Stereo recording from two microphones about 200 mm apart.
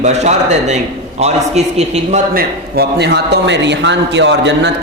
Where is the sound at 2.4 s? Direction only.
55° right (ahead or behind).